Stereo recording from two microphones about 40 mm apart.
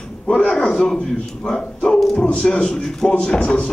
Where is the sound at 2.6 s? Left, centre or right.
Centre.